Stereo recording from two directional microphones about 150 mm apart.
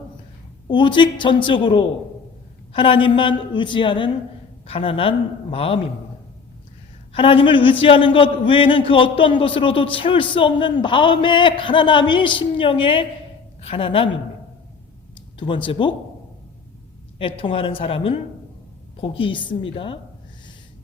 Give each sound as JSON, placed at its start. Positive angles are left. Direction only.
{"t": 0.7, "sound": "a man's voice", "side_deg": 30}
{"t": 7.1, "sound": "a man's voice", "side_deg": 35}
{"t": 15.4, "sound": "a man's voice", "side_deg": 35}
{"t": 17.2, "sound": "a man's voice", "side_deg": 35}